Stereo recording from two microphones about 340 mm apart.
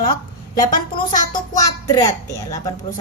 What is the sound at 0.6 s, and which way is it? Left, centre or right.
Speech, left.